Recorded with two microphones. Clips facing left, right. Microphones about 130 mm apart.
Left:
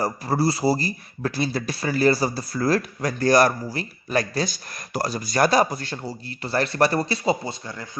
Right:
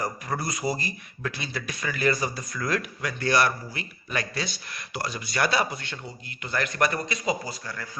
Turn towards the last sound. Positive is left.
turn(degrees=25)  # may be behind; listen again after turning